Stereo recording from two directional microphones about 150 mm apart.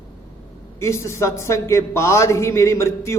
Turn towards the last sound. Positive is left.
turn(degrees=20)  # may be behind; listen again after turning